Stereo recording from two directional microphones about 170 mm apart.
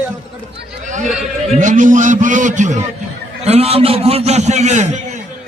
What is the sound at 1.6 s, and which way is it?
A man's voice, 50° right (ahead or behind).